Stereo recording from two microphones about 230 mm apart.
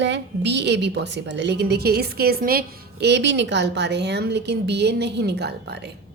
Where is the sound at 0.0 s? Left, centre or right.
Right.